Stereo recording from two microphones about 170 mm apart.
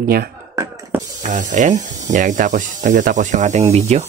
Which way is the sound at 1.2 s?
45° right (ahead or behind).